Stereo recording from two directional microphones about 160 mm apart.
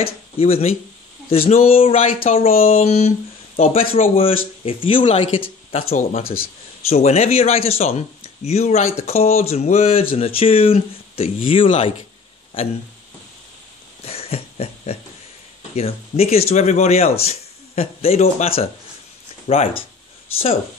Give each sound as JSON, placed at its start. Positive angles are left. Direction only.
{"t": 0.0, "sound": "speech", "side_deg": 40}
{"t": 14.0, "sound": "a sound", "side_deg": 40}
{"t": 15.7, "sound": "speech", "side_deg": 40}